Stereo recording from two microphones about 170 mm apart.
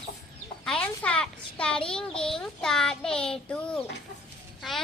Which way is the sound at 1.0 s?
5° left (ahead or behind).